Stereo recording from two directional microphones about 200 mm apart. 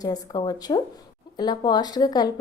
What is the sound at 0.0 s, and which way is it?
A woman's voice, 20° left (ahead or behind).